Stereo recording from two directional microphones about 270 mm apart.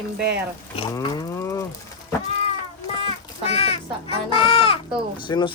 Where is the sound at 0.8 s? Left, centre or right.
Centre.